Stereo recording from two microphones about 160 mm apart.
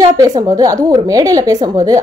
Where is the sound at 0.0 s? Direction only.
20° right (ahead or behind).